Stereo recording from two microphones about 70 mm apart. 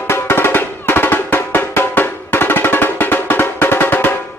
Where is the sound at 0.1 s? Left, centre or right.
Left.